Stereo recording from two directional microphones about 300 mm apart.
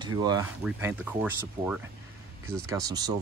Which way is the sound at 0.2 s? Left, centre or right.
Centre.